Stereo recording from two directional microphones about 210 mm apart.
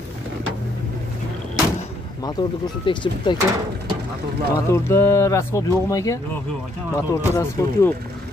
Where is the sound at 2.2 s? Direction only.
20° left (ahead or behind).